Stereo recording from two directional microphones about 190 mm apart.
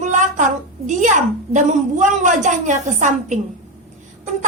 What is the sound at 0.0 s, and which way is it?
A woman's voice, 40° right (ahead or behind).